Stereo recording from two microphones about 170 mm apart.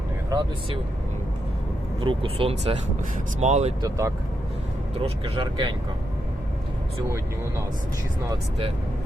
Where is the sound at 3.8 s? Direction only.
20° right (ahead or behind).